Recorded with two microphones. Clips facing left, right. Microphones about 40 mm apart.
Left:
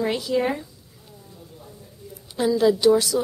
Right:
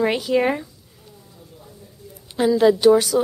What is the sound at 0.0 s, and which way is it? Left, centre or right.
Speech, right.